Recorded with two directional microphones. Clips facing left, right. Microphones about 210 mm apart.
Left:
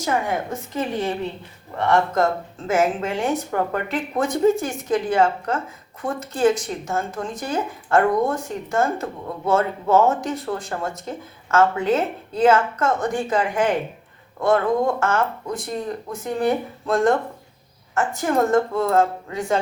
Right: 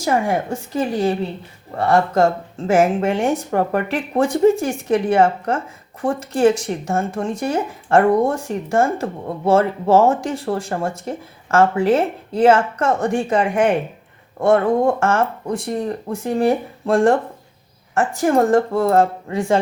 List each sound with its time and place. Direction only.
0.0 s speech: 30° right (ahead or behind)